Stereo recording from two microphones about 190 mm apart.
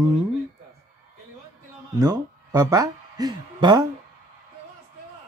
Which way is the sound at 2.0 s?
20° right (ahead or behind).